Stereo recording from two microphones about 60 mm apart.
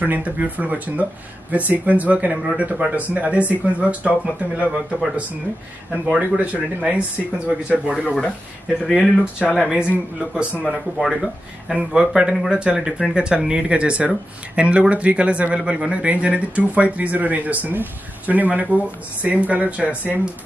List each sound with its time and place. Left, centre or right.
0.0 s speech: right
8.2 s speech: centre
10.3 s speech: centre
10.7 s speech: centre; by 20.2 s right